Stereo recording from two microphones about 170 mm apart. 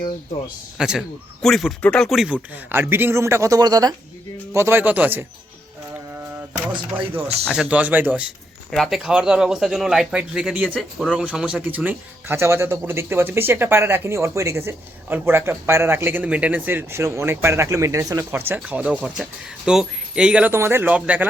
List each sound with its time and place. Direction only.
0.8 s speech: 5° right (ahead or behind)
2.7 s speech: 15° right (ahead or behind)
6.5 s speech: 10° right (ahead or behind)